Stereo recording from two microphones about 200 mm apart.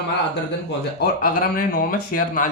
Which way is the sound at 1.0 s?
45° left (ahead or behind).